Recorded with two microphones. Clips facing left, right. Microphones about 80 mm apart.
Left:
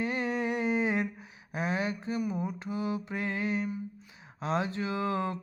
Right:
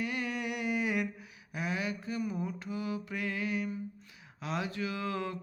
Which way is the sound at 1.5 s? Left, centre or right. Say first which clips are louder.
Left 4 dB; left.